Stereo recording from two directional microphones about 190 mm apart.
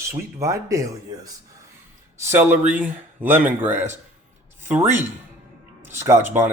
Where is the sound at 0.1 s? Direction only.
15° right (ahead or behind).